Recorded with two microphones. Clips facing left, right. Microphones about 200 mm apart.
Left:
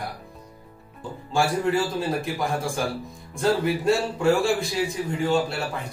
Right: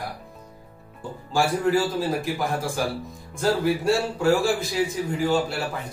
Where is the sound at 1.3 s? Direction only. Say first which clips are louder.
Right 1 dB; centre (ahead or behind).